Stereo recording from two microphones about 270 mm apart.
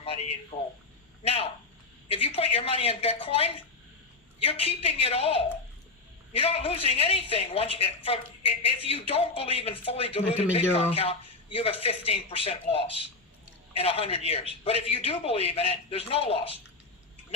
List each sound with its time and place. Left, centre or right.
0.0 s a man's voice: left